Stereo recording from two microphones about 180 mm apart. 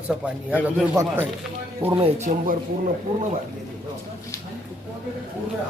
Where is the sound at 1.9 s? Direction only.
30° right (ahead or behind).